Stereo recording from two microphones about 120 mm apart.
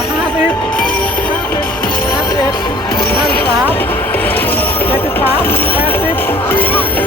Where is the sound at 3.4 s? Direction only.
15° left (ahead or behind).